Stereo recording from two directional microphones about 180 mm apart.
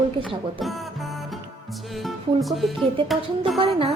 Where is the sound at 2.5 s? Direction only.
Centre (ahead or behind).